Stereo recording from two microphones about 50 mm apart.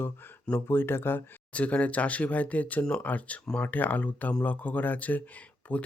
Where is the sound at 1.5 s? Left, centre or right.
Left.